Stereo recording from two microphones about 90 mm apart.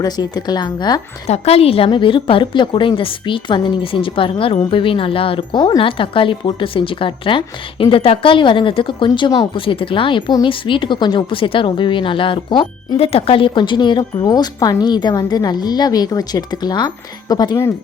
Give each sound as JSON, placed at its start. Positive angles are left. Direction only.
{"t": 0.0, "sound": "a woman's voice", "side_deg": 50}
{"t": 1.5, "sound": "a woman's voice", "side_deg": 90}
{"t": 9.0, "sound": "a woman's voice", "side_deg": 55}
{"t": 9.6, "sound": "a woman's voice", "side_deg": 80}
{"t": 14.3, "sound": "a woman's voice", "side_deg": 45}